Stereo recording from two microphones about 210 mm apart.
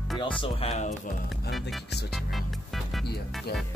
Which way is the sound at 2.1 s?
Centre (ahead or behind).